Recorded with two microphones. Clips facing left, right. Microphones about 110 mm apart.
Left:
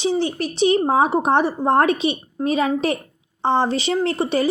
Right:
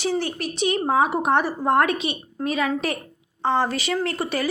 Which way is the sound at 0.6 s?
30° left (ahead or behind).